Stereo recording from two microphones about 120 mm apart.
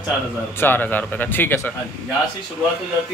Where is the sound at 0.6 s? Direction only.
15° left (ahead or behind).